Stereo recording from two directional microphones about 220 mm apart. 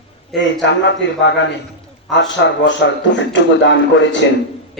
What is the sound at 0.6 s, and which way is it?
A man's voice, 55° left (ahead or behind).